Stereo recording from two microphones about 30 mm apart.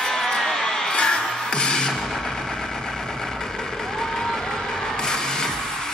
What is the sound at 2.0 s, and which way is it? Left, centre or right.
Vehicle, centre.